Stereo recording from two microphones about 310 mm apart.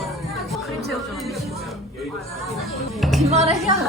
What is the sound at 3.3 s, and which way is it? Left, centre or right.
Speech, centre.